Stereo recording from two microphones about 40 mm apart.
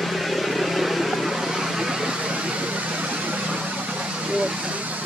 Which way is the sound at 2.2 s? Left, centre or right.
Right.